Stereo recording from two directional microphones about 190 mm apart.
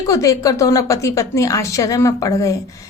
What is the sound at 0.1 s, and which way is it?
A woman's voice, 15° left (ahead or behind).